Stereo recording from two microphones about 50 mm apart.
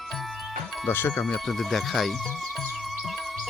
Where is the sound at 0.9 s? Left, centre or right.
Left.